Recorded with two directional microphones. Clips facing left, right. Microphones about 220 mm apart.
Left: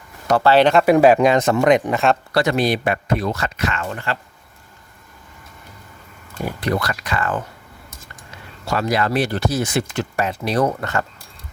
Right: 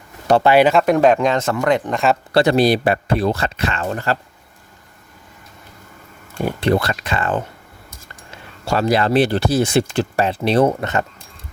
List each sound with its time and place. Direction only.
0.4 s speech: 10° right (ahead or behind)
0.7 s speech: centre (ahead or behind); by 1.9 s 15° left (ahead or behind)
1.9 s speech: centre (ahead or behind)
2.3 s speech: 30° right (ahead or behind)
6.4 s speech: 30° right (ahead or behind)
8.6 s speech: 30° right (ahead or behind)